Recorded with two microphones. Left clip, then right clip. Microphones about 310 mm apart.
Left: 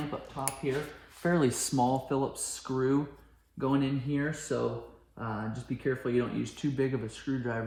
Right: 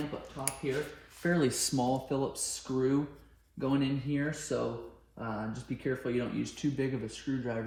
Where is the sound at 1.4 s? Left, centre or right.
Centre.